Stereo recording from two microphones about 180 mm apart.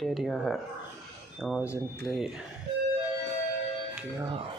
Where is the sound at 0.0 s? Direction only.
Centre (ahead or behind).